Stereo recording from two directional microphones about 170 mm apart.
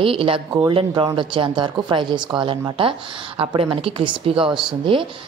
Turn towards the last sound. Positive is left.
turn(degrees=-30)  # may be behind; listen again after turning